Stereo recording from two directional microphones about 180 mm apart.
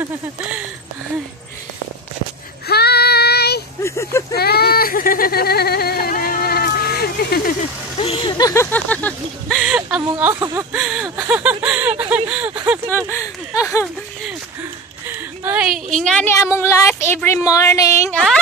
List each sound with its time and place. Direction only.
2.7 s child singing: 60° left (ahead or behind)
3.8 s speech: 15° left (ahead or behind)
4.3 s a sound: 60° left (ahead or behind)
8.0 s speech: 30° left (ahead or behind); by 10.7 s 15° right (ahead or behind)
10.7 s a sound: 5° right (ahead or behind)
12.6 s speech: 10° right (ahead or behind)
13.6 s speech: 15° left (ahead or behind)
14.6 s a sound: 10° right (ahead or behind)
16.3 s speech: 15° left (ahead or behind)